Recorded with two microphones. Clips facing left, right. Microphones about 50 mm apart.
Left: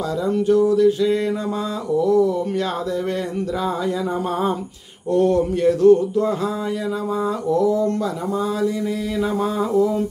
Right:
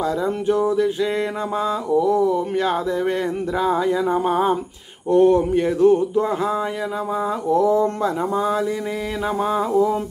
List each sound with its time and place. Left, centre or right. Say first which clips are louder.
0.5 s speech: left 4 dB; right
5.1 s speech: right 3 dB; right
7.4 s speech: right 2 dB; right
9.4 s a sound: right 2 dB; centre